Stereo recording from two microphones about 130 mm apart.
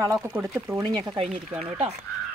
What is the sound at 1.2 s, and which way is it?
Speech, 60° right (ahead or behind).